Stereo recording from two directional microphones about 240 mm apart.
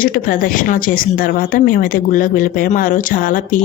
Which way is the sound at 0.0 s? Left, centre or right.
Left.